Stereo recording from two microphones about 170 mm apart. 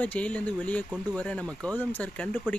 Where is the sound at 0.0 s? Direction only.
10° left (ahead or behind).